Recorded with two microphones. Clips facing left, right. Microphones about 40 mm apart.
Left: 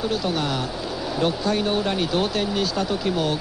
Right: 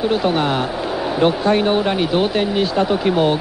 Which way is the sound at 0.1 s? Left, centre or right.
Right.